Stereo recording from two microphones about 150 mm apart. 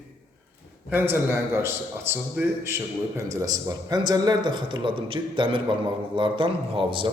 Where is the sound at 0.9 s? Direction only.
15° right (ahead or behind); by 7.1 s 35° right (ahead or behind).